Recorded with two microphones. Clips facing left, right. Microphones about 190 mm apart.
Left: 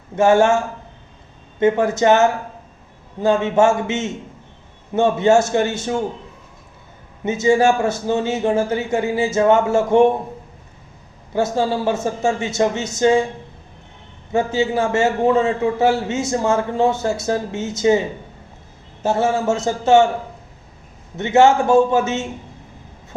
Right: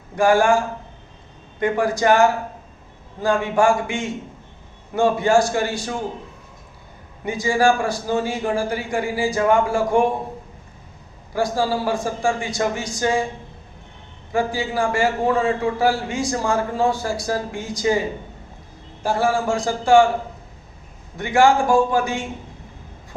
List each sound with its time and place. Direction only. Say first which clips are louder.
0.2 s a man's voice: left 2 dB; 25° left (ahead or behind)
7.3 s a man's voice: left 3 dB; 25° left (ahead or behind)
11.3 s a man's voice: left 2 dB; 25° left (ahead or behind)
14.3 s a man's voice: left 4 dB; 25° left (ahead or behind)
19.0 s a man's voice: left 2 dB; 25° left (ahead or behind)
21.2 s a man's voice: left 3 dB; 25° left (ahead or behind)